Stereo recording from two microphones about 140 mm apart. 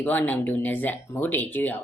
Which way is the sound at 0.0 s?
10° left (ahead or behind).